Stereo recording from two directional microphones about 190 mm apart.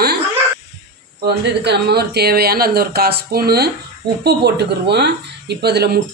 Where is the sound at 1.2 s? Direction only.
60° right (ahead or behind).